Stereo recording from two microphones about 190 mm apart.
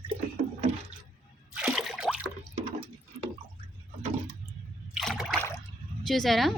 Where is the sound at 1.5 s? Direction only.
Centre (ahead or behind).